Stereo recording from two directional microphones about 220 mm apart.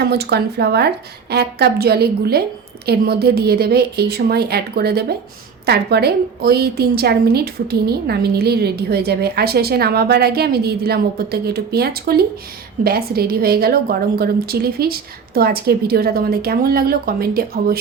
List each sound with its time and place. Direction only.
0.0 s a woman's voice: 50° right (ahead or behind)